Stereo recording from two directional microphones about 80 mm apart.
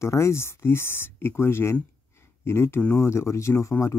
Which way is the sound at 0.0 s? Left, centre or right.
Left.